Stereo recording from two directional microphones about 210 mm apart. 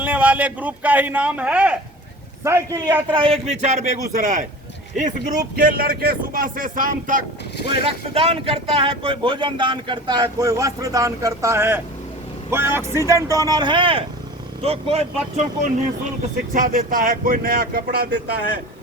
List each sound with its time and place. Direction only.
0.0 s speech: 5° right (ahead or behind); by 7.2 s 40° right (ahead or behind)
7.9 s speech: 25° right (ahead or behind)
16.6 s speech: 40° right (ahead or behind)